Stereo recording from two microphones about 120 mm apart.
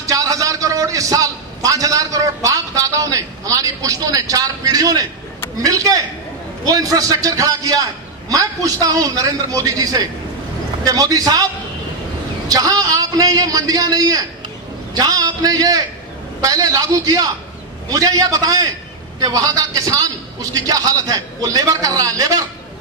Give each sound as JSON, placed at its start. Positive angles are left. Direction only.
{"t": 0.1, "sound": "a man's voice", "side_deg": -30}
{"t": 12.4, "sound": "a man's voice", "side_deg": -30}